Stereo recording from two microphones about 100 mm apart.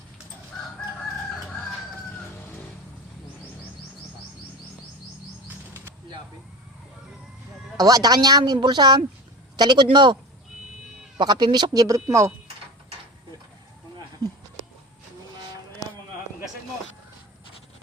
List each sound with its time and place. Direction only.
5.5 s bird flight: 20° right (ahead or behind)
7.8 s speech: 40° right (ahead or behind)
11.2 s speech: 50° right (ahead or behind); by 12.3 s 30° right (ahead or behind)
15.8 s a sound: 40° left (ahead or behind)